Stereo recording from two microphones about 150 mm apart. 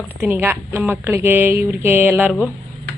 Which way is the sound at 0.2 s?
15° right (ahead or behind).